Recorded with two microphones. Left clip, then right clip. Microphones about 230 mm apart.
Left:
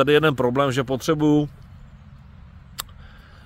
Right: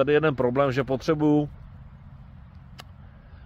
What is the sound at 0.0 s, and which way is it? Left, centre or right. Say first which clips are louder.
Speech: left 4 dB; left.